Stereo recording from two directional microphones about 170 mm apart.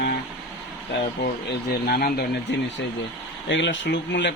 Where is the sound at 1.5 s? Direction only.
65° left (ahead or behind).